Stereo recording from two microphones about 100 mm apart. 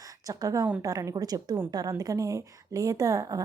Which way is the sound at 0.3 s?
35° right (ahead or behind).